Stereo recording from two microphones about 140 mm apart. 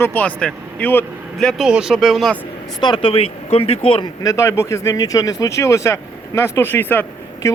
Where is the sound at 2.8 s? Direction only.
35° left (ahead or behind).